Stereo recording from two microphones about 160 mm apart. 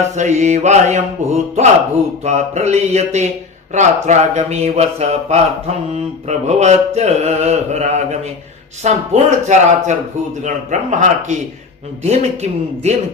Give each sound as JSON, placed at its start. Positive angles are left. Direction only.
{"t": 0.2, "sound": "mantra", "side_deg": -45}